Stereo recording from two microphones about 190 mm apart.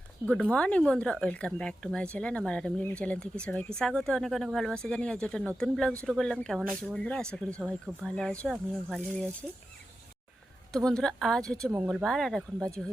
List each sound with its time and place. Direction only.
0.2 s speech: 15° right (ahead or behind)
0.5 s speech: 5° left (ahead or behind)
10.7 s speech: 5° left (ahead or behind)